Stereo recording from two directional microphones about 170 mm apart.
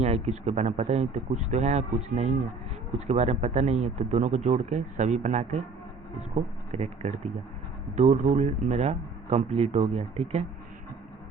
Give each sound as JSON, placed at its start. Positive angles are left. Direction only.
{"t": 0.0, "sound": "a man's voice", "side_deg": -40}